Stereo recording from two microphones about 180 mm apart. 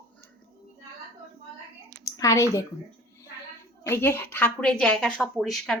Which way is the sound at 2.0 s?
20° left (ahead or behind).